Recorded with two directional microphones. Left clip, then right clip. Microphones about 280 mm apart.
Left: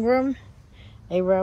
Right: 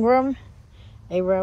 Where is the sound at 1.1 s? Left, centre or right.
Centre.